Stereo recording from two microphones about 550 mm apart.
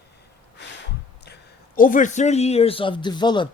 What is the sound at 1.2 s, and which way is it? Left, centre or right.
A man's voice, centre.